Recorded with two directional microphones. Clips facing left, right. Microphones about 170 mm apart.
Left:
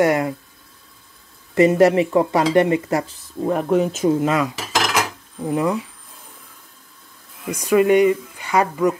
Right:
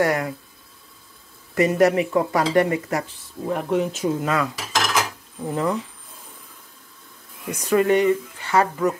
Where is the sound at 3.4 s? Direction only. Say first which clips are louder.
Left 4 dB; 45° left (ahead or behind).